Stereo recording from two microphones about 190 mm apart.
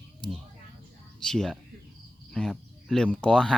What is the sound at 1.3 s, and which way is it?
Speech, centre (ahead or behind).